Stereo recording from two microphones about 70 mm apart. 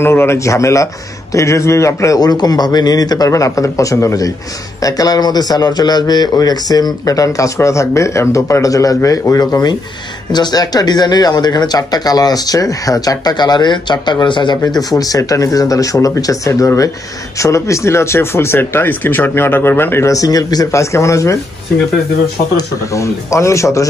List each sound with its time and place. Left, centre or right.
0.0 s speech: left
0.4 s speech: left
2.1 s speech: left
3.3 s speech: left
4.8 s a man's voice: left
10.3 s speech: left
15.0 s a man's voice: left
20.1 s speech: left
22.9 s speech: left